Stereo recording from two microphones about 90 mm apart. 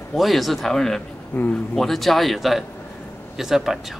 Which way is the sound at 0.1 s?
Centre (ahead or behind).